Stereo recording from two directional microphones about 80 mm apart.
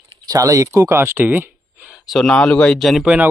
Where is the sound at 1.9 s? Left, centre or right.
Centre.